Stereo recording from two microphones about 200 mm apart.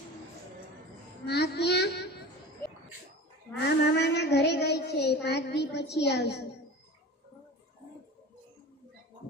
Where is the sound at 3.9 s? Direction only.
55° left (ahead or behind).